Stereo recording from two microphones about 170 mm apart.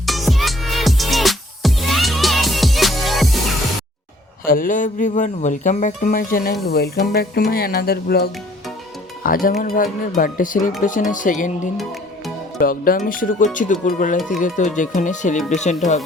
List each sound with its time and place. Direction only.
0.0 s music: centre (ahead or behind)
4.4 s speech: 55° left (ahead or behind)